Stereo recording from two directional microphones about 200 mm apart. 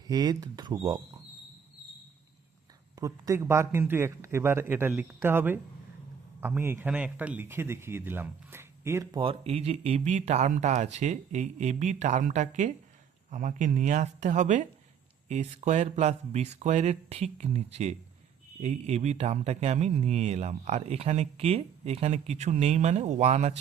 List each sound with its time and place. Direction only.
0.1 s speech: 20° right (ahead or behind)
3.0 s speech: 15° right (ahead or behind)
9.2 s speech: 30° right (ahead or behind)